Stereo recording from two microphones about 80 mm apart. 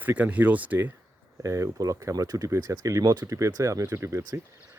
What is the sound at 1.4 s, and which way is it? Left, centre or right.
Speech, right.